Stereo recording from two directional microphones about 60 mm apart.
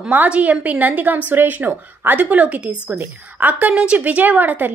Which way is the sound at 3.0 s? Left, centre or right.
Right.